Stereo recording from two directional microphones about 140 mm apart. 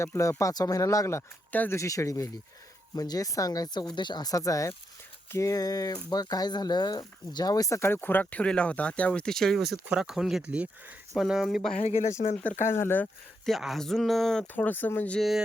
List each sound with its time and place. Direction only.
0.0 s speech: 20° left (ahead or behind); by 11.7 s centre (ahead or behind)
11.8 s speech: 55° left (ahead or behind)
12.6 s speech: 15° left (ahead or behind)
13.4 s speech: centre (ahead or behind)